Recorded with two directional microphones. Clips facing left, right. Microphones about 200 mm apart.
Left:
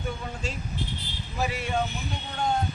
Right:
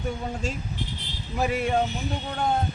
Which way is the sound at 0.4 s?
45° right (ahead or behind).